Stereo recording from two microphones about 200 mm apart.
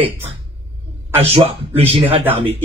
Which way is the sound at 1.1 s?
30° right (ahead or behind).